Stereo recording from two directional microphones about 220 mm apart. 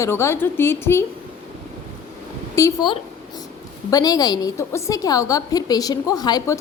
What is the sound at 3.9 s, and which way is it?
A woman's voice, 15° left (ahead or behind).